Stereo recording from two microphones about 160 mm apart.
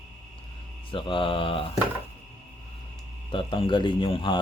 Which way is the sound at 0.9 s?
30° left (ahead or behind).